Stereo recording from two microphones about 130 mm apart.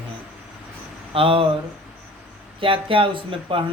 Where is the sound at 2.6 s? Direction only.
45° right (ahead or behind).